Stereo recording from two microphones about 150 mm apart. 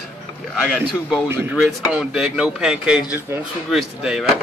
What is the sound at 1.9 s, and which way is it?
Speech, 5° right (ahead or behind).